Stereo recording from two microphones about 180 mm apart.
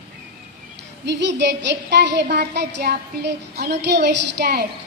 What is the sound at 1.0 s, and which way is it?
A woman's voice, 75° right (ahead or behind).